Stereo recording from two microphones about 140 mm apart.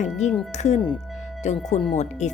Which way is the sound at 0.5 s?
55° left (ahead or behind).